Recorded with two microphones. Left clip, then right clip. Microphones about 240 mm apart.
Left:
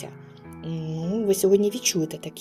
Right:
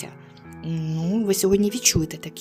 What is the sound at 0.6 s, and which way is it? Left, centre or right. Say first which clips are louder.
Speech: right 2 dB; right.